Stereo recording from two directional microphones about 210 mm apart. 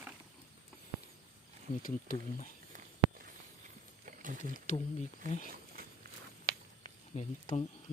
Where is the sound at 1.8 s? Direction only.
40° left (ahead or behind).